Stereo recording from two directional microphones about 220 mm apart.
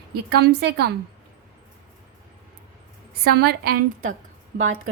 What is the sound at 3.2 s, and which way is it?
Speech, 45° right (ahead or behind).